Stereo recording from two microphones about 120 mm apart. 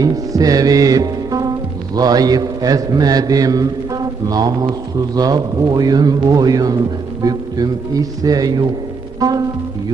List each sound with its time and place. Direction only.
0.0 s music: 30° right (ahead or behind)
2.0 s a man's voice: 30° right (ahead or behind)